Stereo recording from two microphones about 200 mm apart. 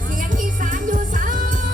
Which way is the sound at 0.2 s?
40° right (ahead or behind).